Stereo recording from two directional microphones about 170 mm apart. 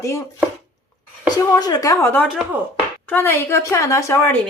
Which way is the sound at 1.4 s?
20° left (ahead or behind).